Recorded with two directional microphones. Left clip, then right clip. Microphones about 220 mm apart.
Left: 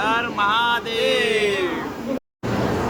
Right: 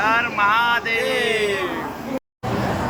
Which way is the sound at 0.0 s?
20° left (ahead or behind).